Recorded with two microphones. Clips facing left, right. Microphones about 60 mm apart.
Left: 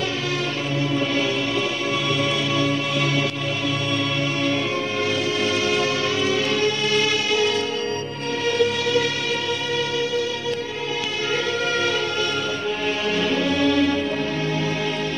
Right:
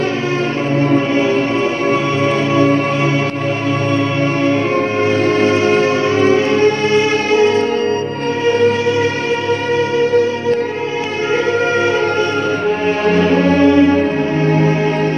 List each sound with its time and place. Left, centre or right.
0.7 s music: right
2.5 s music: right
5.2 s music: right
13.0 s music: right